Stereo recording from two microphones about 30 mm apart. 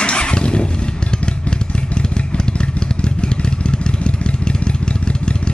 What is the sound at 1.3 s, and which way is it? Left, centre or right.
Motorcycle, left.